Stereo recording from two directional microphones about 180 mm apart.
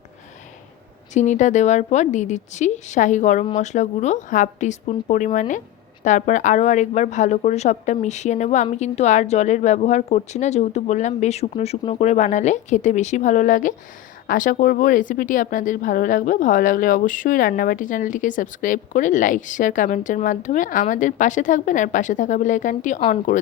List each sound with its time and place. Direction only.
1.1 s speech: 40° left (ahead or behind)